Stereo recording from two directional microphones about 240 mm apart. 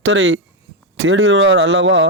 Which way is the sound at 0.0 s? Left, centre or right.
Right.